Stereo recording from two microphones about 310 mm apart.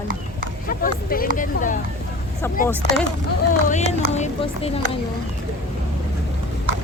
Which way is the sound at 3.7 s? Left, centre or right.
Left.